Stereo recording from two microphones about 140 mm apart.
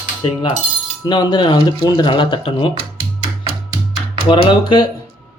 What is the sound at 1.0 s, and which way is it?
Speech, 30° left (ahead or behind).